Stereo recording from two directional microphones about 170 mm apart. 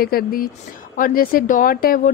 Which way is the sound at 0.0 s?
60° left (ahead or behind).